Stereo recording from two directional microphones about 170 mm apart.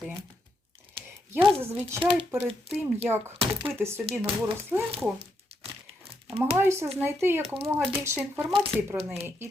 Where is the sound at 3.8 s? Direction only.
15° right (ahead or behind).